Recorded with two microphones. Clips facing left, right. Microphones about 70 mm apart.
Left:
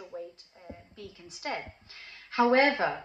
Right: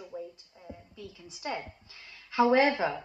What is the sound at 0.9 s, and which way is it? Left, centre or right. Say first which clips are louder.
Speech: even; right.